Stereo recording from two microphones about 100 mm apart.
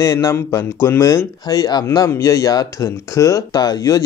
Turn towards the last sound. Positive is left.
turn(degrees=35)  # may be behind; listen again after turning